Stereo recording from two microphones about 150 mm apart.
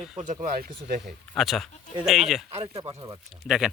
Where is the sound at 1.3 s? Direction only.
Centre (ahead or behind).